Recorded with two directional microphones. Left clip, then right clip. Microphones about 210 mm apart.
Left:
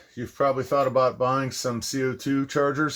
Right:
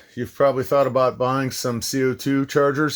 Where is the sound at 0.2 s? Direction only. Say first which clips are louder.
Right 5 dB; 45° right (ahead or behind).